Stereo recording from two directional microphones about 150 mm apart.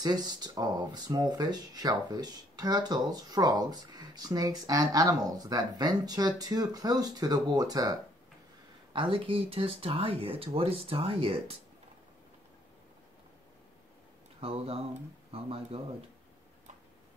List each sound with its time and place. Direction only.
0.0 s speech: 25° right (ahead or behind)
14.4 s speech: 40° right (ahead or behind)